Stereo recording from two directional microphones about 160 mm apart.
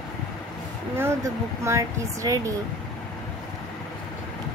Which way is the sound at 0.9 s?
15° right (ahead or behind).